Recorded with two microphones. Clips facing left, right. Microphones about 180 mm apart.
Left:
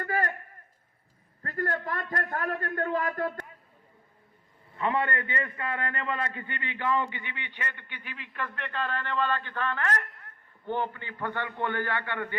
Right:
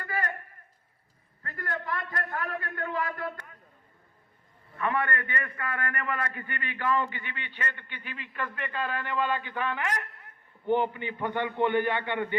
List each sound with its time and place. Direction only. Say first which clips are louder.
0.0 s a sound: left 4 dB; 45° left (ahead or behind)
1.4 s a man's voice: left 5 dB; 45° left (ahead or behind)
4.8 s a man's voice: left 1 dB; 20° left (ahead or behind)
8.1 s a man's voice: right 1 dB; centre (ahead or behind); by 12.4 s 20° right (ahead or behind)